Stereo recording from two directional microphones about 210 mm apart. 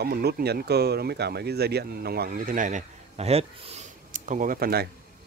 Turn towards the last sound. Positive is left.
turn(degrees=-45)  # may be behind; listen again after turning